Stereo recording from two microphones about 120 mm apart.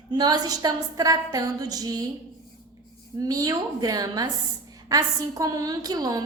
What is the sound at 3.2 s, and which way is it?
A woman's voice, 30° right (ahead or behind).